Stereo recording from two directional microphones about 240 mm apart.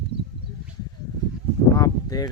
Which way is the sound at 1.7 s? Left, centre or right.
Centre.